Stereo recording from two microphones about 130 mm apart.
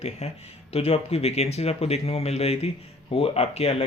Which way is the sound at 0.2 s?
55° left (ahead or behind).